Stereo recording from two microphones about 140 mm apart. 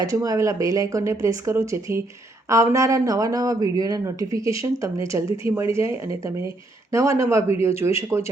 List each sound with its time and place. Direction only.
0.0 s speech: 25° right (ahead or behind)